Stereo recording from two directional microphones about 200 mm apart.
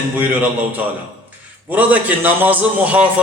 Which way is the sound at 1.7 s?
10° right (ahead or behind).